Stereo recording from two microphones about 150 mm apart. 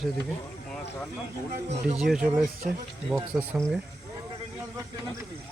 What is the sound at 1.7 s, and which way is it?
Speech, 45° right (ahead or behind).